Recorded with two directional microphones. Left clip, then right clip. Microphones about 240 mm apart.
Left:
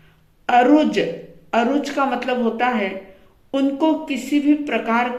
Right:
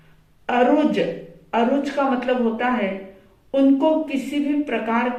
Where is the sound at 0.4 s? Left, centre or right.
Left.